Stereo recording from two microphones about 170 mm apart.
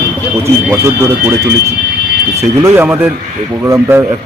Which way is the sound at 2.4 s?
15° right (ahead or behind).